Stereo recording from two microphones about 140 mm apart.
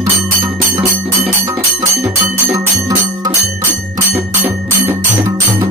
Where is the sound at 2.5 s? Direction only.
25° right (ahead or behind).